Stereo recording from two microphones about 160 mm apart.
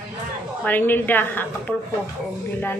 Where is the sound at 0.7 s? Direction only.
10° left (ahead or behind).